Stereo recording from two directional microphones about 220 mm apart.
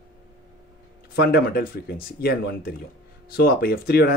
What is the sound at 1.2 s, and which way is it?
Speech, 45° left (ahead or behind).